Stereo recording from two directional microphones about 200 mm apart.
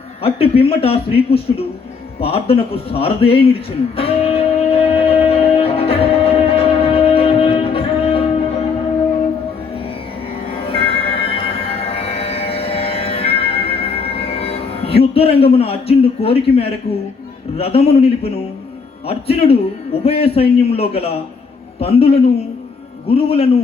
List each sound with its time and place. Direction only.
0.2 s speech: 30° left (ahead or behind)
2.2 s music: 30° left (ahead or behind)
10.7 s music: 30° left (ahead or behind)
17.6 s speech: 30° left (ahead or behind)